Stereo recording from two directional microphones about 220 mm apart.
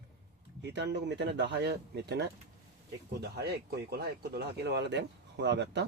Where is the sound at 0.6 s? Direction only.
50° right (ahead or behind).